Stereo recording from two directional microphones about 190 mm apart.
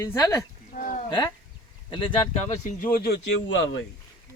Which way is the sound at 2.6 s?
45° left (ahead or behind).